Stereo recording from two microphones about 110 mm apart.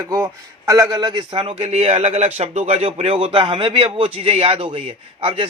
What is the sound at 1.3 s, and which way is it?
Speech, 60° right (ahead or behind).